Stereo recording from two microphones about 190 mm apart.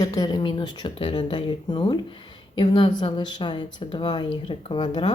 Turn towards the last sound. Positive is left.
turn(degrees=25)  # may be behind; listen again after turning